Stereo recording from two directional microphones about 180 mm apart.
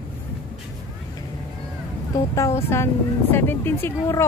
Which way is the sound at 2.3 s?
15° left (ahead or behind).